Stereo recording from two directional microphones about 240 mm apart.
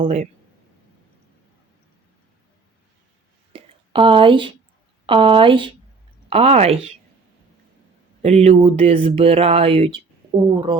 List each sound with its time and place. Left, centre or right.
0.0 s speech: right
3.5 s a sound: right
5.0 s speech: right
8.2 s speech: right